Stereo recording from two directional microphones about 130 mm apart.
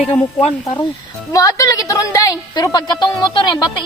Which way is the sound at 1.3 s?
25° left (ahead or behind).